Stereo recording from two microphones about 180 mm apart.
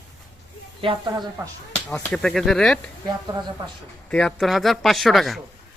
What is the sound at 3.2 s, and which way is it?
Speech, 20° right (ahead or behind).